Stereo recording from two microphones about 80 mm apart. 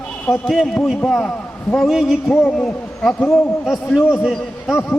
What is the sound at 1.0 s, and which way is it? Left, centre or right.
A man's voice, centre.